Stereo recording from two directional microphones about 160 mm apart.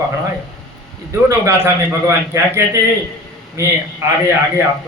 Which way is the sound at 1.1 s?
15° right (ahead or behind).